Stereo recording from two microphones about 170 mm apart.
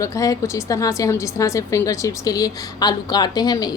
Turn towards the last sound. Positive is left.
turn(degrees=25)  # may be behind; listen again after turning